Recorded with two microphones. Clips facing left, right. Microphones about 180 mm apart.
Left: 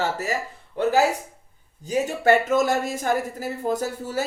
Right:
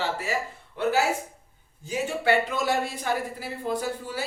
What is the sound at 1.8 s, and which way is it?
Speech, 45° left (ahead or behind).